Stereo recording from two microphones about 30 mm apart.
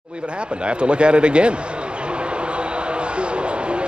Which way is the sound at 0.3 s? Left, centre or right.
Right.